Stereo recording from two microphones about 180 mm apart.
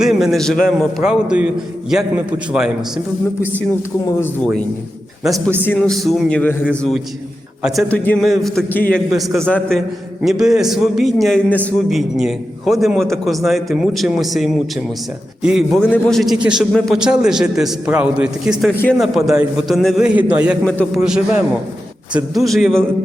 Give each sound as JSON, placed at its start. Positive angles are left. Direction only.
{"t": 0.0, "sound": "a man's voice", "side_deg": 0}
{"t": 5.6, "sound": "a man's voice", "side_deg": 5}